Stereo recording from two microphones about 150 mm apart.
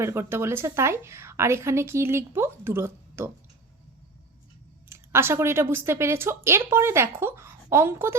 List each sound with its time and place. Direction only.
0.0 s a woman's voice: 15° right (ahead or behind)
4.9 s a woman's voice: 15° right (ahead or behind)